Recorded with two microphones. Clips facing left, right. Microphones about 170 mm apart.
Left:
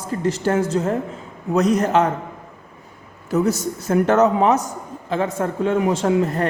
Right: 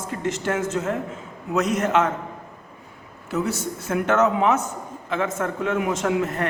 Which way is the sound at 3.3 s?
40° left (ahead or behind).